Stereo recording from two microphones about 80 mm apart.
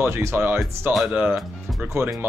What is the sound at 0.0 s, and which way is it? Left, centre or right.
Speech, right.